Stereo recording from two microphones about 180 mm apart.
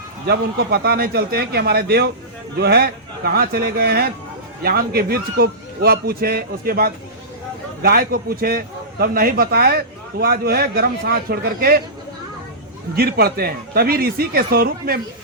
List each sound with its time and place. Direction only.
0.3 s a man's voice: 60° right (ahead or behind)
13.0 s a man's voice: 60° right (ahead or behind)